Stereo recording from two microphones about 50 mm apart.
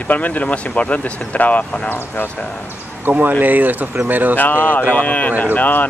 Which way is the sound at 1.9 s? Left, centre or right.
Left.